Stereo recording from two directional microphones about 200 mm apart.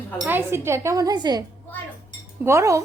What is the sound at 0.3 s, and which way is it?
A woman's voice, 10° right (ahead or behind).